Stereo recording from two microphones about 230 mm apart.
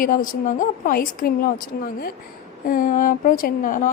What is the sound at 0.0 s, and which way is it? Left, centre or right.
A woman's voice, left.